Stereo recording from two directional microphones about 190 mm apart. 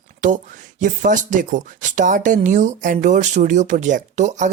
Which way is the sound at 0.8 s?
40° right (ahead or behind).